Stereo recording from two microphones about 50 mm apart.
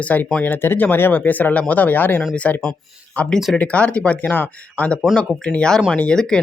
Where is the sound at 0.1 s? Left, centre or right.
Left.